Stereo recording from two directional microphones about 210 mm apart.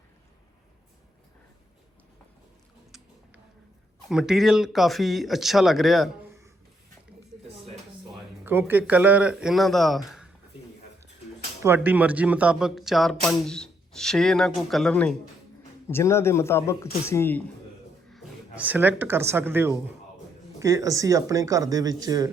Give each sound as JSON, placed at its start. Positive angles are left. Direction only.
{"t": 4.1, "sound": "speech", "side_deg": 0}
{"t": 8.4, "sound": "speech", "side_deg": -10}
{"t": 11.6, "sound": "a man's voice", "side_deg": -10}
{"t": 18.1, "sound": "speech", "side_deg": -5}